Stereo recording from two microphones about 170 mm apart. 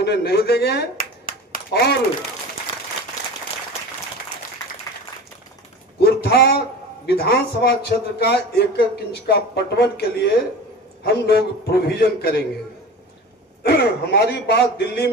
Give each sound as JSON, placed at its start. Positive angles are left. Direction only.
{"t": 0.0, "sound": "speech", "side_deg": 75}
{"t": 6.0, "sound": "a sound", "side_deg": 70}
{"t": 7.0, "sound": "a man's voice", "side_deg": 65}
{"t": 13.6, "sound": "a man's voice", "side_deg": 70}